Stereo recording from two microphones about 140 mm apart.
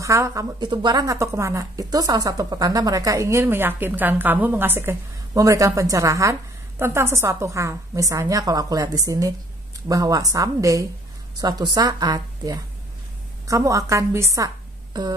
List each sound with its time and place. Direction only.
0.0 s speech: 20° right (ahead or behind)